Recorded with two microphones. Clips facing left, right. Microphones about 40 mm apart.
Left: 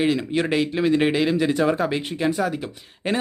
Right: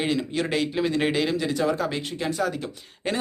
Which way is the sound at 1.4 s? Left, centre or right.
Left.